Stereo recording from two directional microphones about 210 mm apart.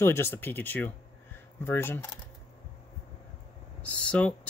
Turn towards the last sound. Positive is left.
turn(degrees=5)  # may be behind; listen again after turning